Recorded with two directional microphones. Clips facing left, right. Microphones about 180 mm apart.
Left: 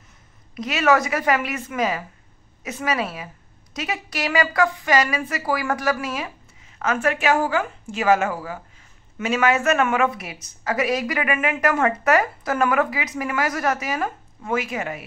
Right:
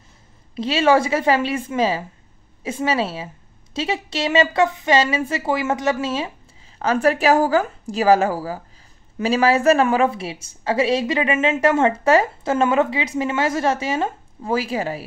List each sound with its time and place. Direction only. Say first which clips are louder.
0.6 s a woman's voice: right 3 dB; 30° right (ahead or behind)